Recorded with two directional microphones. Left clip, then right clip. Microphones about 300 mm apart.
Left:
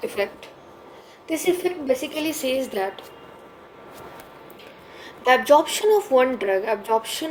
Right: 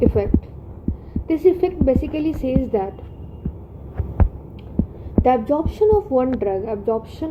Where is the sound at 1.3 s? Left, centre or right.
Left.